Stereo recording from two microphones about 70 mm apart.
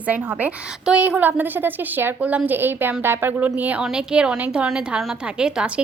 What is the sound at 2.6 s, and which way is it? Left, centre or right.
A woman's voice, right.